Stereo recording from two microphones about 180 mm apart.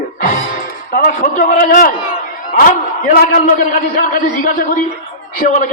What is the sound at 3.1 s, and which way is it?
A man's voice, 55° left (ahead or behind).